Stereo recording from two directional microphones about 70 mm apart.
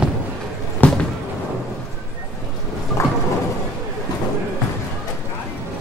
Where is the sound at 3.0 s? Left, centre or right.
Left.